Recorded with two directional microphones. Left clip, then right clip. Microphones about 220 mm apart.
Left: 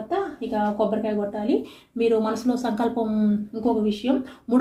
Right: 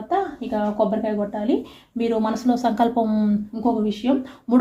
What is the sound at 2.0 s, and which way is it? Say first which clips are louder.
Speech: left 1 dB; 35° right (ahead or behind).